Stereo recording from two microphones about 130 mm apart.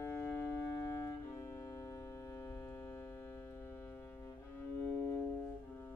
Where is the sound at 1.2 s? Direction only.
20° left (ahead or behind).